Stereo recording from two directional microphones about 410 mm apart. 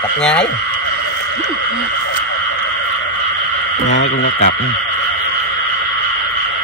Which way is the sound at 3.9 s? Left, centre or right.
Left.